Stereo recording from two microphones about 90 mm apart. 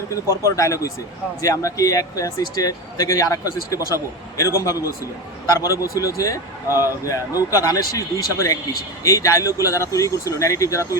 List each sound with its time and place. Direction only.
0.3 s speech: 35° left (ahead or behind)